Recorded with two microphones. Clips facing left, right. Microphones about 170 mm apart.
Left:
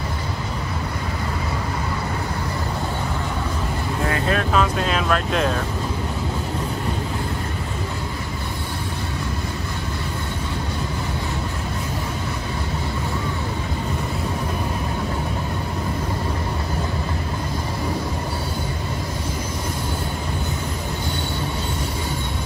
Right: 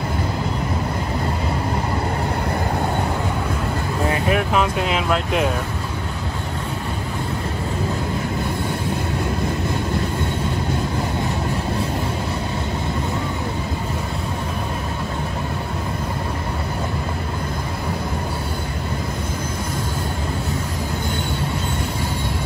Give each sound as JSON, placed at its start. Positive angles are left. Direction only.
{"t": 4.1, "sound": "speech", "side_deg": -15}